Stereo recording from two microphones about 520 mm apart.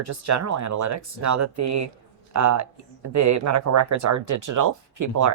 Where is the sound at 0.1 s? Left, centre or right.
Right.